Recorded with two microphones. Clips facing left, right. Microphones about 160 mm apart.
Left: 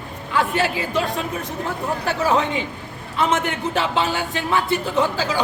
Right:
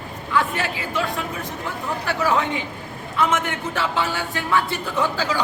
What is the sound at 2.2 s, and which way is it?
Speech, 30° left (ahead or behind).